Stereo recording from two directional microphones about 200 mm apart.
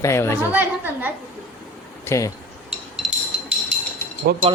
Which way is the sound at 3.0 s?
Centre (ahead or behind).